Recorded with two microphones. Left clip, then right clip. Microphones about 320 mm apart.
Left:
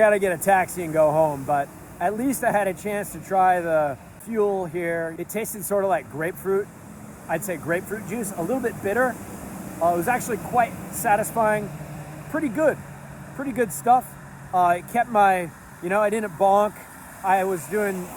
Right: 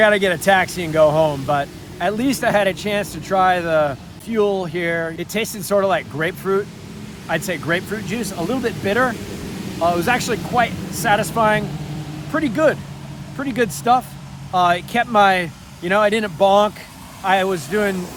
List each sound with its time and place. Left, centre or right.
0.8 s speech: right